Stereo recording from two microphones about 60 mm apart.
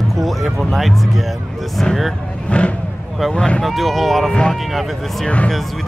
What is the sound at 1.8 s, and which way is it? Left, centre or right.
Speech, centre.